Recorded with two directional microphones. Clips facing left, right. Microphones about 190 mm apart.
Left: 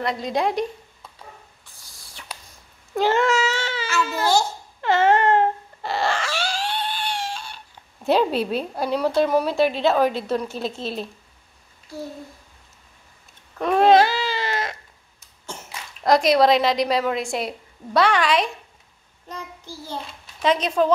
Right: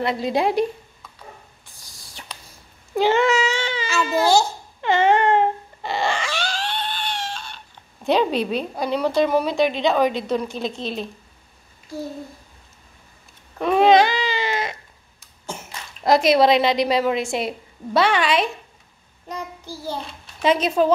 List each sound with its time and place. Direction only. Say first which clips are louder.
0.0 s a woman's voice: right 2 dB; 5° right (ahead or behind)
2.2 s cat: left 1 dB; 5° right (ahead or behind)
4.1 s child singing: right 5 dB; 10° right (ahead or behind)
4.8 s dog: even; 5° left (ahead or behind)
13.6 s cat: right 1 dB; centre (ahead or behind)
16.0 s a woman's voice: right 1 dB; 5° right (ahead or behind)
19.2 s child singing: right 4 dB; 10° right (ahead or behind)